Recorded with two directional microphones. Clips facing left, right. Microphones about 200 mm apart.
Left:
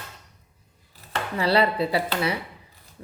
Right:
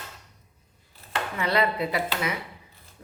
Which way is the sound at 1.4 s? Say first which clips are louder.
Left 4 dB; 35° left (ahead or behind).